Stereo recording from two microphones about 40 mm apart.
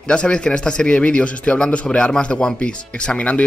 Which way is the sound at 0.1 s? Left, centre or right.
Left.